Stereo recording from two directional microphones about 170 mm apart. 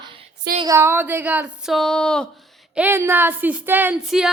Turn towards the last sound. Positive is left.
turn(degrees=-5)  # may be behind; listen again after turning